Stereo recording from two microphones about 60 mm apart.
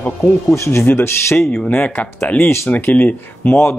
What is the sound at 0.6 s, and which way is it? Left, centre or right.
Speech, left.